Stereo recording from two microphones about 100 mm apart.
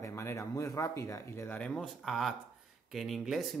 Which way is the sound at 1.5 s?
10° left (ahead or behind).